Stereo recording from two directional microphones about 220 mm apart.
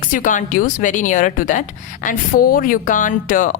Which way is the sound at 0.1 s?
35° left (ahead or behind).